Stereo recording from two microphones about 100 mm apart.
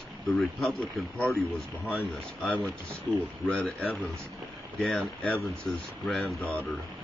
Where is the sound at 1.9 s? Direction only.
15° left (ahead or behind).